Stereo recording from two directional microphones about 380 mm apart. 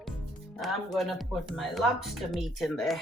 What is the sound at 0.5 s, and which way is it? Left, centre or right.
Speech, centre.